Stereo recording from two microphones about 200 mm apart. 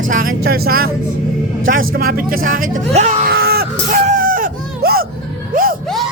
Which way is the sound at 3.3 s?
50° right (ahead or behind).